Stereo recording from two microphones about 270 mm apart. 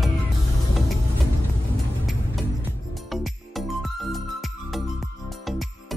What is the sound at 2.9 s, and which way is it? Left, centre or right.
Music, centre.